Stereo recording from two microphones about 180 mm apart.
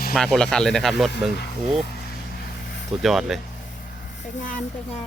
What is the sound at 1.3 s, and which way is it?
Speech, 65° left (ahead or behind).